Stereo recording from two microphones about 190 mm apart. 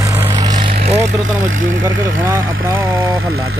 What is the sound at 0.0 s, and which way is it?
Vehicle, 15° right (ahead or behind).